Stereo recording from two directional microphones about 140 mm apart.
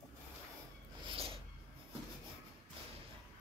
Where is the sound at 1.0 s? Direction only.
40° right (ahead or behind).